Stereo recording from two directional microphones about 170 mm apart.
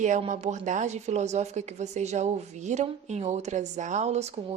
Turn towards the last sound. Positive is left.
turn(degrees=-40)  # may be behind; listen again after turning